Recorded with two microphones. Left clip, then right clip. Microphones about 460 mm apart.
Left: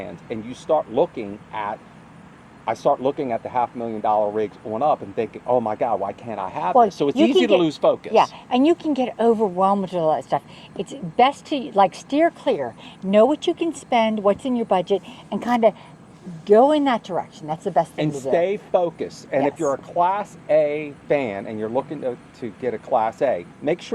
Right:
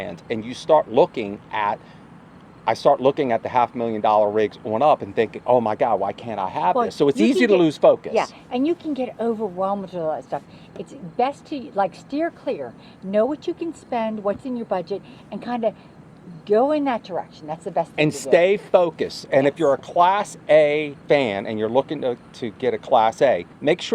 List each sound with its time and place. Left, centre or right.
0.0 s speech: centre
8.1 s a woman's voice: left
16.5 s a woman's voice: left
17.9 s speech: right